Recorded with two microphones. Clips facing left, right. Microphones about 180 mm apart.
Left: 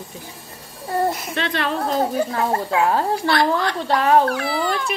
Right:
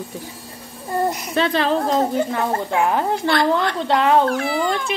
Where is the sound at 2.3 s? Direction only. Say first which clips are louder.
Even; 20° right (ahead or behind).